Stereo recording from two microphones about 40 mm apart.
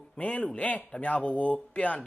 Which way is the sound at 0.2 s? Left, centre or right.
Left.